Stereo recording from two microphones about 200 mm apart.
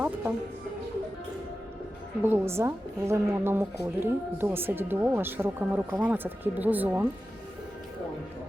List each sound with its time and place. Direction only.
2.2 s a woman's voice: 10° right (ahead or behind)